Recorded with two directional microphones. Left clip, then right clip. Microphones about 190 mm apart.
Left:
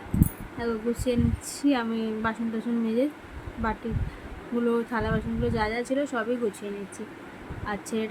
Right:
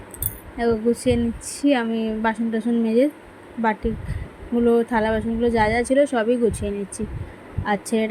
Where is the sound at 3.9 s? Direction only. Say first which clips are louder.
Right 8 dB; 25° right (ahead or behind).